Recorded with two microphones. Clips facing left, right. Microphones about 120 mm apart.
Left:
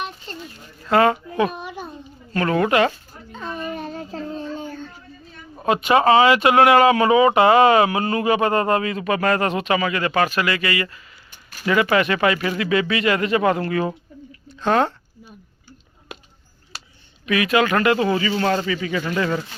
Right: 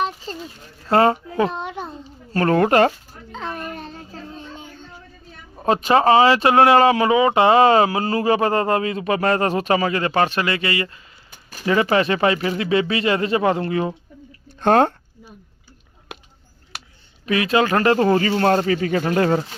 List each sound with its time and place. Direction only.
0.9 s a child's voice: 30° right (ahead or behind)
2.3 s speech: 45° right (ahead or behind)
3.5 s a sound: centre (ahead or behind)
3.9 s a sound: 40° left (ahead or behind)
5.6 s speech: 35° right (ahead or behind)
14.6 s speech: 50° right (ahead or behind)
17.2 s speech: 30° right (ahead or behind)